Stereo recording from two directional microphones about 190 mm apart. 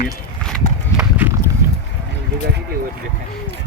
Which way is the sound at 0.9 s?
10° right (ahead or behind).